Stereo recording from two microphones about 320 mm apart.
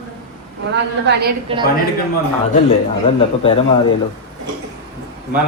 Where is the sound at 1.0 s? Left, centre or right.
Right.